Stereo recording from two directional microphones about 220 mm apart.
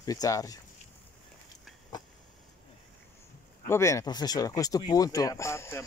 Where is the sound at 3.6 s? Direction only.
10° left (ahead or behind).